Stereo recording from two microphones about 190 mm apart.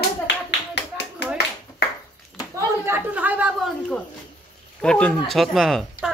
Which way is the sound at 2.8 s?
10° right (ahead or behind).